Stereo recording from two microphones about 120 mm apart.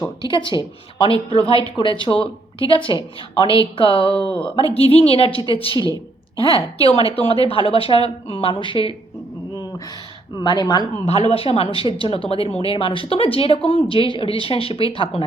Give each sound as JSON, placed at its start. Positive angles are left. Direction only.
{"t": 0.3, "sound": "speech", "side_deg": 40}
{"t": 4.1, "sound": "speech", "side_deg": 10}
{"t": 4.7, "sound": "speech", "side_deg": 55}
{"t": 5.7, "sound": "a woman's voice", "side_deg": -35}
{"t": 6.3, "sound": "speech", "side_deg": 50}
{"t": 10.3, "sound": "a woman's voice", "side_deg": 30}
{"t": 11.0, "sound": "speech", "side_deg": 60}